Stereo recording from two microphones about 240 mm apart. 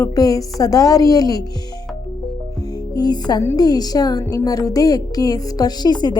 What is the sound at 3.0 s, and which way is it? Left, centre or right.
A woman's voice, centre.